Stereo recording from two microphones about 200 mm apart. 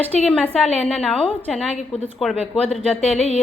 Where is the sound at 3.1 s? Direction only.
30° left (ahead or behind).